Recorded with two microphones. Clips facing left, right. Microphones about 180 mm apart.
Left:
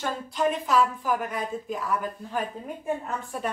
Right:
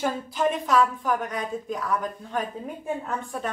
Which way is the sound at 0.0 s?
5° right (ahead or behind).